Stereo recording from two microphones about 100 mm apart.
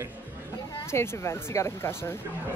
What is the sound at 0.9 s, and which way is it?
Speech, 25° left (ahead or behind).